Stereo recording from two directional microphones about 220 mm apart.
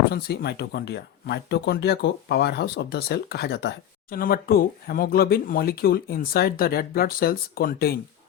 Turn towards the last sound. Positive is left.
turn(degrees=40)  # may be behind; listen again after turning